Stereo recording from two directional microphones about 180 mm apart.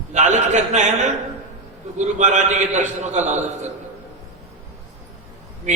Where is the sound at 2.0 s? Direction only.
40° right (ahead or behind).